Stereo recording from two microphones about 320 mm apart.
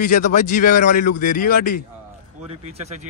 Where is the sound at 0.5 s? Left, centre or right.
Left.